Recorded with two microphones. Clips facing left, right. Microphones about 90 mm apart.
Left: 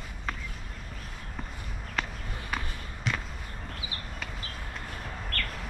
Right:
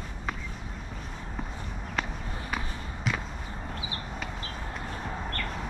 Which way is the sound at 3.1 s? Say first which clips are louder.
Right 1 dB; centre (ahead or behind).